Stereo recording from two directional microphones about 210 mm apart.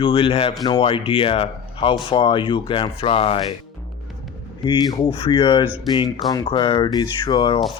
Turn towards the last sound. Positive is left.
turn(degrees=20)  # may be behind; listen again after turning